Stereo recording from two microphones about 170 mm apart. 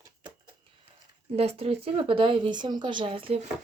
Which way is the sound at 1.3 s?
35° right (ahead or behind).